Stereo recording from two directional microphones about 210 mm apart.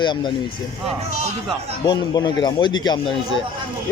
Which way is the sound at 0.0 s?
20° left (ahead or behind).